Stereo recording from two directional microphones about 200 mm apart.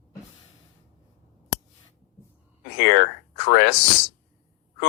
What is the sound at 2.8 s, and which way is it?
Speech, 55° left (ahead or behind).